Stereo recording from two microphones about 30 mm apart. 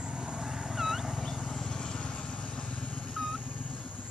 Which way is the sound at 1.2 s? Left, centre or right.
Centre.